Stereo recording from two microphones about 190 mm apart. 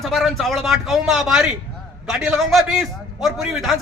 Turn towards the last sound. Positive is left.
turn(degrees=0)  # may be behind; listen again after turning